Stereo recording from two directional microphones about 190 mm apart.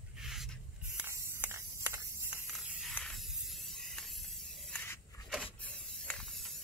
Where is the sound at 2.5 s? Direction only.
Centre (ahead or behind).